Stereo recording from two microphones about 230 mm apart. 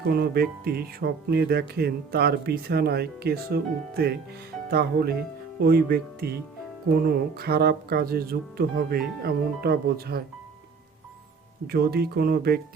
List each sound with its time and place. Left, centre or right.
0.0 s speech: right
11.6 s speech: right